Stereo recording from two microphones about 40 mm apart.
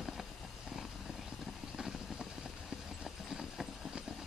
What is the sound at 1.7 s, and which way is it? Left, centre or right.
Vehicle, centre.